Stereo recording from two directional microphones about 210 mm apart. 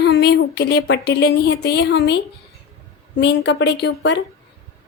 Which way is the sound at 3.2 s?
55° left (ahead or behind).